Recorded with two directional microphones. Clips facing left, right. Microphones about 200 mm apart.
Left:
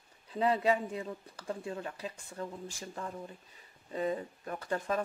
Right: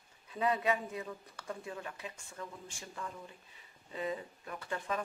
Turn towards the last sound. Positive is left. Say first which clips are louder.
# left 4 dB
turn(degrees=40)  # may be behind; listen again after turning